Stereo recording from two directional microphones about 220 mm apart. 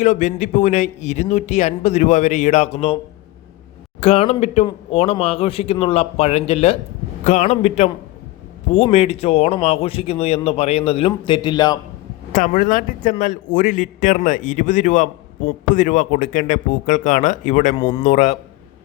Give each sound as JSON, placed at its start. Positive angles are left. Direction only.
{"t": 0.0, "sound": "a man's voice", "side_deg": 35}
{"t": 4.0, "sound": "speech", "side_deg": 30}
{"t": 12.3, "sound": "a man's voice", "side_deg": 35}
{"t": 17.7, "sound": "speech", "side_deg": 25}